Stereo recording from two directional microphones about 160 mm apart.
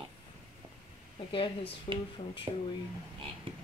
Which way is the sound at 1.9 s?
30° left (ahead or behind).